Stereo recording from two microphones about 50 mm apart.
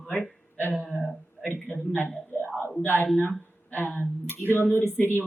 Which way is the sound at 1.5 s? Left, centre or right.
Left.